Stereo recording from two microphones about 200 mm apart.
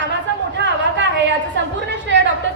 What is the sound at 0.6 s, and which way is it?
A woman's voice, 60° right (ahead or behind).